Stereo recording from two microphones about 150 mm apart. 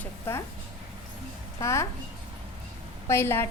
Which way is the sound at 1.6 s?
20° left (ahead or behind).